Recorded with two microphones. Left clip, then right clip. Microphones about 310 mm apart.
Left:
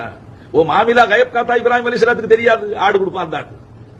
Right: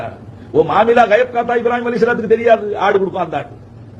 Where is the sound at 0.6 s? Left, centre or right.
Left.